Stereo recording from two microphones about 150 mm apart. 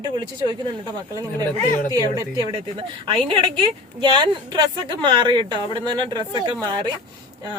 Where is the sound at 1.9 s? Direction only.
25° right (ahead or behind).